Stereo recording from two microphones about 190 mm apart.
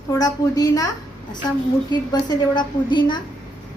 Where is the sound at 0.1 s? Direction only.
20° left (ahead or behind).